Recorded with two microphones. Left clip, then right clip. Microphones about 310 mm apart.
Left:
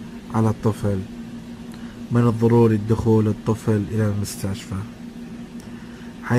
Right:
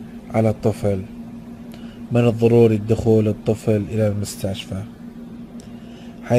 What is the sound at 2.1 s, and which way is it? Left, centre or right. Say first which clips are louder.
Speech: right 3 dB; right.